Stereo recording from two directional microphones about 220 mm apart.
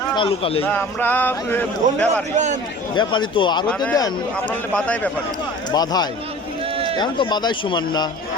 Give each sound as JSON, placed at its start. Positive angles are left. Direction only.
{"t": 0.2, "sound": "speech", "side_deg": 25}
{"t": 0.6, "sound": "a man's voice", "side_deg": 10}
{"t": 2.3, "sound": "speech", "side_deg": -35}
{"t": 2.9, "sound": "a man's voice", "side_deg": 20}
{"t": 5.7, "sound": "a man's voice", "side_deg": 20}